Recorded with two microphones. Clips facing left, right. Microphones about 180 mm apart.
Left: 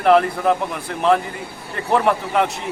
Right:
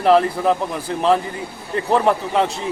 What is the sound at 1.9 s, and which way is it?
Speech, 30° right (ahead or behind).